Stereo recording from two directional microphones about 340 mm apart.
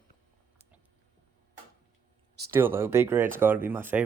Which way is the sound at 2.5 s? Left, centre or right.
Centre.